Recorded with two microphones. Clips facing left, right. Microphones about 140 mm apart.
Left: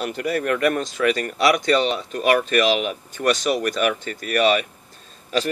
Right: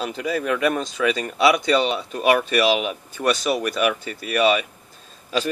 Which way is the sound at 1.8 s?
5° right (ahead or behind).